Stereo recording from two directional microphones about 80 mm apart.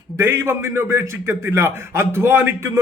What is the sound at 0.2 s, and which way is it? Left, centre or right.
A man's voice, right.